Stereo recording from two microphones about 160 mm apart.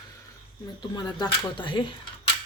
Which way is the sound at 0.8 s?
25° left (ahead or behind).